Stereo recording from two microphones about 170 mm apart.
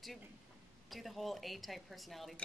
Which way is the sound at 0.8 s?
Centre (ahead or behind).